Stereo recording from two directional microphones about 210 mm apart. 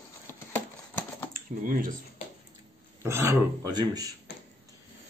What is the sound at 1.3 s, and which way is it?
Speech, 40° right (ahead or behind).